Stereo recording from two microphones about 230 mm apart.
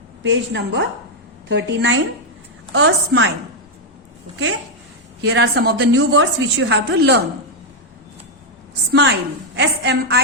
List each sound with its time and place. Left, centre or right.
0.2 s a woman's voice: right
5.2 s a woman's voice: right
8.9 s a woman's voice: right